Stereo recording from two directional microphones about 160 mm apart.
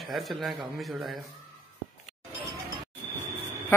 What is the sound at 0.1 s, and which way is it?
Speech, centre (ahead or behind).